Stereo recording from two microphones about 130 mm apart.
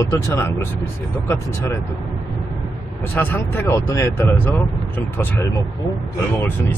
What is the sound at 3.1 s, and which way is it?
Speech, 15° left (ahead or behind).